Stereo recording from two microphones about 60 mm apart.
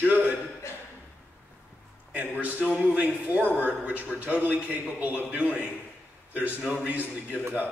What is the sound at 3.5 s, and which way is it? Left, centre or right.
Speech, left.